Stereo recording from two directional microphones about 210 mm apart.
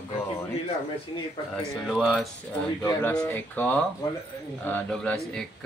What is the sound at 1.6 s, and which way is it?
Speech, centre (ahead or behind).